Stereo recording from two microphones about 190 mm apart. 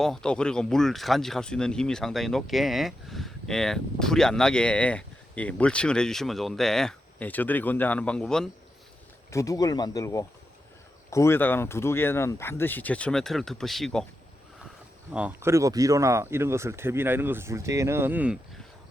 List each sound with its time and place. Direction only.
0.0 s speech: 5° left (ahead or behind)
9.3 s speech: 15° left (ahead or behind); by 14.0 s centre (ahead or behind)
15.1 s speech: 10° right (ahead or behind)